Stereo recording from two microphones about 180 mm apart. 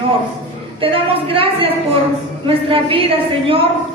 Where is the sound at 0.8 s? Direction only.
30° right (ahead or behind).